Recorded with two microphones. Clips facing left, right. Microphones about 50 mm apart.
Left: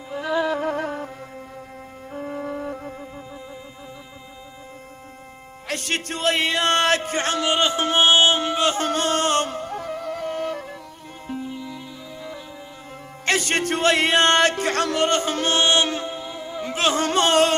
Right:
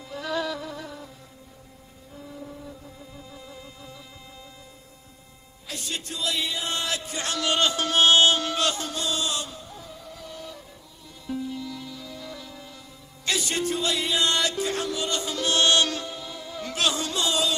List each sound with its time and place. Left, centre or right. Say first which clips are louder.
0.1 s music: left 6 dB; left
0.5 s music: left 11 dB; left
2.1 s flute: left 11 dB; left
5.6 s speech: left 8 dB; left
7.4 s music: left 1 dB; left
8.7 s music: left 8 dB; left
12.1 s music: left 4 dB; left
13.2 s music: left 5 dB; left
15.5 s music: left 1 dB; left
16.8 s music: left 7 dB; left